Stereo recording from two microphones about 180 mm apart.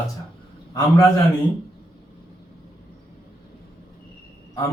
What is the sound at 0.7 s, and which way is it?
Speech, 20° left (ahead or behind).